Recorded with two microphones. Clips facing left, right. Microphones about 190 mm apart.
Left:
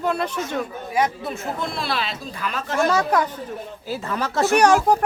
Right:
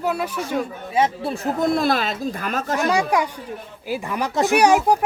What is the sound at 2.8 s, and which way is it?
Speech, 10° right (ahead or behind).